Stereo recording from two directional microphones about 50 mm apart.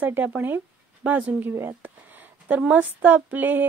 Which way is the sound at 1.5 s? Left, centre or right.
Right.